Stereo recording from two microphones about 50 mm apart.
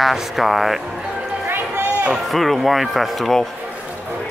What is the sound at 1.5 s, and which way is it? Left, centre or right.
Run, right.